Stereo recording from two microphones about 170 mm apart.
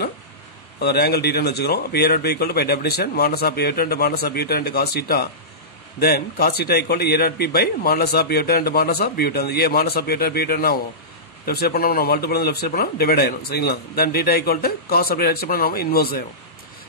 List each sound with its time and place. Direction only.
0.7 s a man's voice: 70° left (ahead or behind)